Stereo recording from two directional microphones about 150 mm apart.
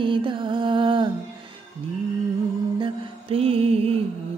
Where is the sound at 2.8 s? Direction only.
40° right (ahead or behind).